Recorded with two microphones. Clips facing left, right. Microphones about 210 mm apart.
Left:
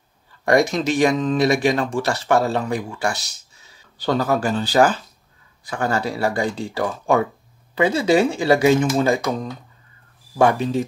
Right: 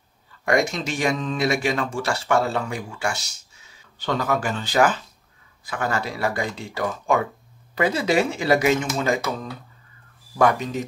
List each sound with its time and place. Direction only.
0.5 s speech: 35° left (ahead or behind)
10.3 s speech: 30° left (ahead or behind)